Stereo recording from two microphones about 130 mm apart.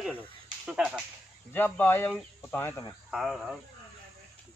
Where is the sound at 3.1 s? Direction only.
5° right (ahead or behind).